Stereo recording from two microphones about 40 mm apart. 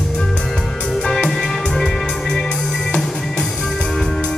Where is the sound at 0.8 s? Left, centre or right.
Centre.